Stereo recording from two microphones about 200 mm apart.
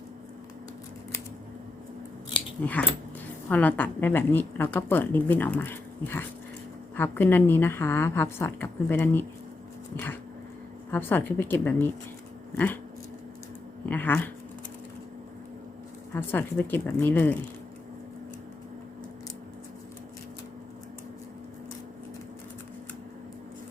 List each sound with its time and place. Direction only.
2.6 s a woman's voice: 10° left (ahead or behind)
10.9 s a woman's voice: 10° left (ahead or behind)
13.8 s a woman's voice: 10° left (ahead or behind)
16.1 s a woman's voice: 10° left (ahead or behind)